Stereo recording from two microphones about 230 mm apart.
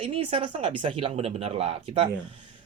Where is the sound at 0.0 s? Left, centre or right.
Right.